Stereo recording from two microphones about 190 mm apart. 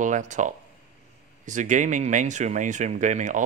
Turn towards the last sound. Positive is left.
turn(degrees=-40)  # may be behind; listen again after turning